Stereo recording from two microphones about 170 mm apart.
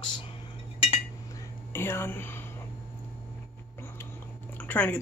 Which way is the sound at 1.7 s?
15° left (ahead or behind).